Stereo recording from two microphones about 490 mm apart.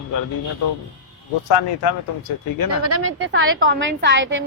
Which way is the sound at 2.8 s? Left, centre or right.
Right.